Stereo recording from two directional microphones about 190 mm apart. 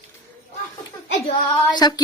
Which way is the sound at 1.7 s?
20° left (ahead or behind).